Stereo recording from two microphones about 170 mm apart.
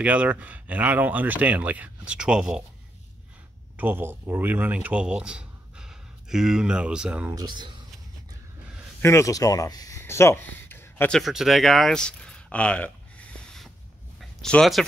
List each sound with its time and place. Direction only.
0.0 s speech: 10° right (ahead or behind)
3.7 s speech: 10° right (ahead or behind)
7.2 s speech: 25° right (ahead or behind)
9.0 s speech: 15° left (ahead or behind)